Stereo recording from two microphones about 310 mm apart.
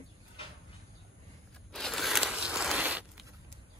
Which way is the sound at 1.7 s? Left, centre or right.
Centre.